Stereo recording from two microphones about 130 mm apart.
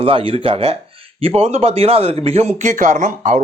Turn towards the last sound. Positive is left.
turn(degrees=-75)  # may be behind; listen again after turning